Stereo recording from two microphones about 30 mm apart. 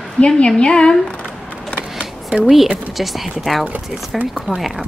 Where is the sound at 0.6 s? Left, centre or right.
Left.